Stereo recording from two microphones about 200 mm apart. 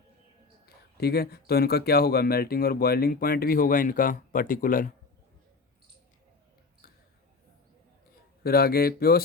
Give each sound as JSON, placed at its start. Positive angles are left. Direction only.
{"t": 0.6, "sound": "speech", "side_deg": 50}
{"t": 8.4, "sound": "speech", "side_deg": 50}